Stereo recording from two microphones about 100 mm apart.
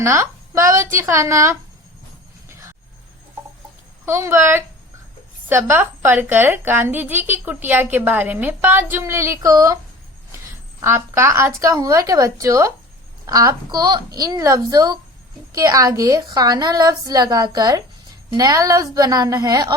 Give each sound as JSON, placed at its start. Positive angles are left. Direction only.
{"t": 0.0, "sound": "a woman's voice", "side_deg": -30}
{"t": 4.0, "sound": "a woman's voice", "side_deg": -30}
{"t": 10.8, "sound": "a woman's voice", "side_deg": -25}